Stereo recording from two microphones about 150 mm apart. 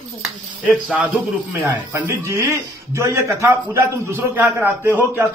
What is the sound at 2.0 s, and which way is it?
A man's voice, 20° right (ahead or behind).